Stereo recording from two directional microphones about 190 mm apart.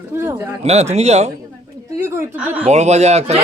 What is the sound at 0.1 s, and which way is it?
Shofar, 10° right (ahead or behind).